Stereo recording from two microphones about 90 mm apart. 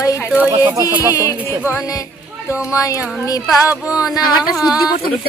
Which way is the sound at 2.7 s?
35° left (ahead or behind).